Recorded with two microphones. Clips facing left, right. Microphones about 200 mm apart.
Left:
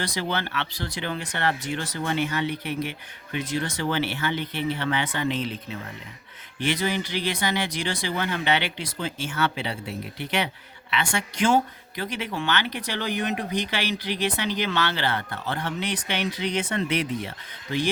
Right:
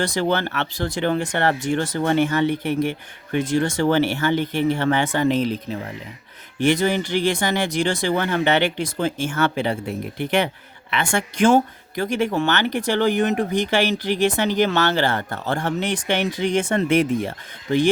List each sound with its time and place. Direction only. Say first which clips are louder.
0.0 s speech: right 7 dB; 50° right (ahead or behind)